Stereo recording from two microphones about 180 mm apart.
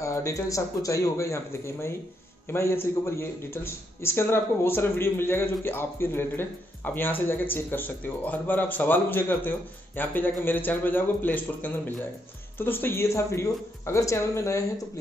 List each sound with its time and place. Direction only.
0.0 s a man's voice: 15° left (ahead or behind)